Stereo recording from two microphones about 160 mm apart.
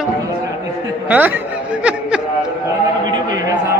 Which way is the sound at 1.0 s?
10° right (ahead or behind).